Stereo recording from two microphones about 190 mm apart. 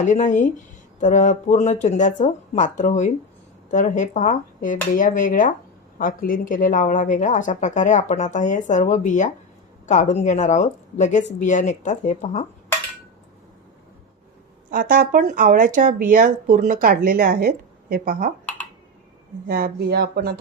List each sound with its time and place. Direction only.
0.0 s a woman's voice: 40° left (ahead or behind)
14.7 s speech: 50° right (ahead or behind)
19.5 s speech: 50° right (ahead or behind)